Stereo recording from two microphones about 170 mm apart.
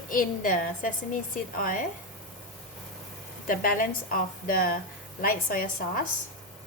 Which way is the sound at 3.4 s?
55° left (ahead or behind).